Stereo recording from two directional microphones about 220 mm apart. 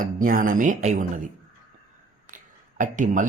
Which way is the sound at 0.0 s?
40° right (ahead or behind).